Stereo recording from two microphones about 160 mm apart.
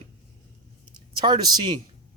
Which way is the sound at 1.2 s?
25° right (ahead or behind).